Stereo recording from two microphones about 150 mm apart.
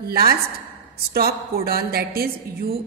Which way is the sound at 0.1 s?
90° right.